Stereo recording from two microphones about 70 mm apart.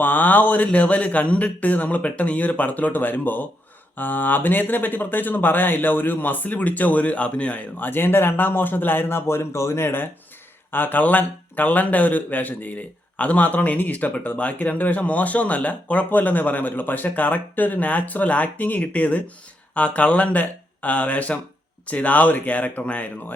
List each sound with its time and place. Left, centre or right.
0.0 s a man's voice: left